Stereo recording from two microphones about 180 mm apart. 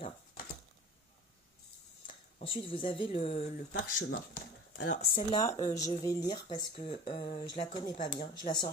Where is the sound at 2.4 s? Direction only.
30° left (ahead or behind).